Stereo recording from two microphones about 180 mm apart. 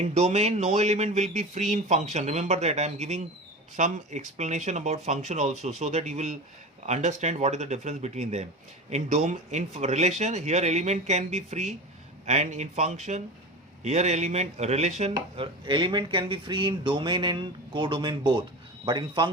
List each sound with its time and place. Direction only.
0.0 s speech: 40° right (ahead or behind)